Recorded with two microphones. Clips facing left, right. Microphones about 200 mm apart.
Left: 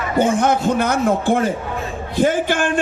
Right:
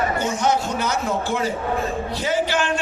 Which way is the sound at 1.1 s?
55° left (ahead or behind).